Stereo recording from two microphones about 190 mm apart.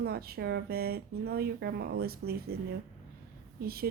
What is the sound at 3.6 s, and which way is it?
Speech, 55° right (ahead or behind).